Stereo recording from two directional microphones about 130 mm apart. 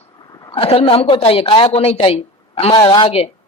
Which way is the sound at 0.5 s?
45° left (ahead or behind).